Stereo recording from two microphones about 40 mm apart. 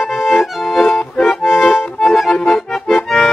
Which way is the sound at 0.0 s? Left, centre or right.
Centre.